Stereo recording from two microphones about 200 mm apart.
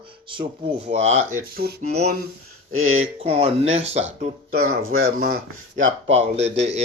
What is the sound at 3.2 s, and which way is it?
Speech, 30° right (ahead or behind).